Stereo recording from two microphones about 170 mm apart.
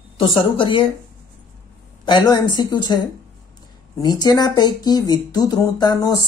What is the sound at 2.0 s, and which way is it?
Speech, 25° left (ahead or behind).